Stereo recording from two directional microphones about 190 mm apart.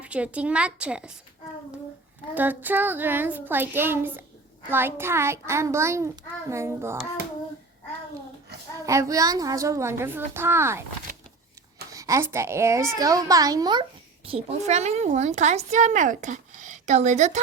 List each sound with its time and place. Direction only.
0.0 s a woman's voice: 5° right (ahead or behind)
2.3 s a woman's voice: 10° right (ahead or behind)
8.9 s a woman's voice: 15° right (ahead or behind)
11.9 s a woman's voice: 15° right (ahead or behind)
14.3 s a woman's voice: 35° right (ahead or behind)